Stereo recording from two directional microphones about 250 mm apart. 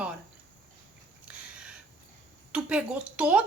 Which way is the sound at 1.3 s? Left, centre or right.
Centre.